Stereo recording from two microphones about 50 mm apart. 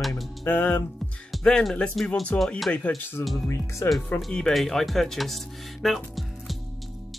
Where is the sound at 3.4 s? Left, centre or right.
Left.